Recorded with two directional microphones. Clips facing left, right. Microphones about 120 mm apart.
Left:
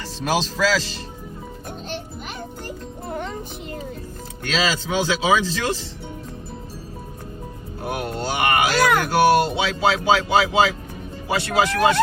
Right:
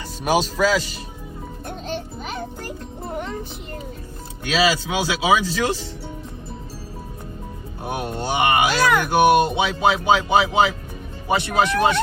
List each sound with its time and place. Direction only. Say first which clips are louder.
0.2 s speech: right 2 dB; 10° right (ahead or behind)
4.4 s speech: right 3 dB; 10° right (ahead or behind)
7.9 s speech: even; 20° right (ahead or behind)